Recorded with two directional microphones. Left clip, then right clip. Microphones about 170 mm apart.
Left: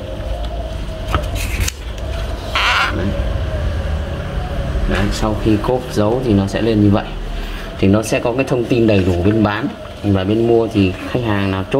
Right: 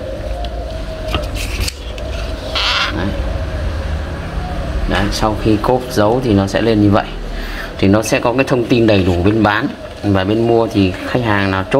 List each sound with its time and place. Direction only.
2.5 s sheep: 45° left (ahead or behind)
5.1 s speech: 10° right (ahead or behind)